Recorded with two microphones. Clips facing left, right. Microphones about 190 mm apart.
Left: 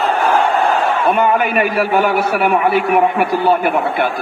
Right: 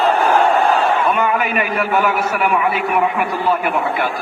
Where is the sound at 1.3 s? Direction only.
35° left (ahead or behind).